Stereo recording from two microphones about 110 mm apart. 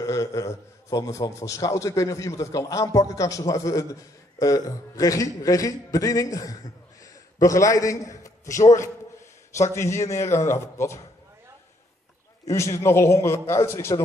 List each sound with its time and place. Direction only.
0.0 s a man's voice: 30° left (ahead or behind)
9.6 s a man's voice: 25° left (ahead or behind)
12.4 s a man's voice: 25° left (ahead or behind)